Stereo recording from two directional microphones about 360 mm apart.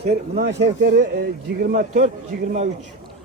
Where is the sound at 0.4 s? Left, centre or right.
Right.